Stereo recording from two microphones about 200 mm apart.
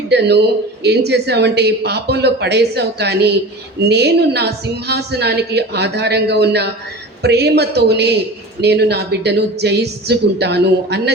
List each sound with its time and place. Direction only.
0.1 s a man's voice: 55° right (ahead or behind)